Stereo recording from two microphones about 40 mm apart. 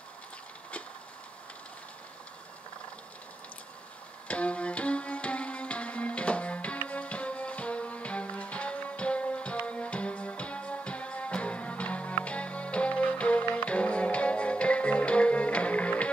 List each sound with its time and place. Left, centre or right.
4.3 s music: left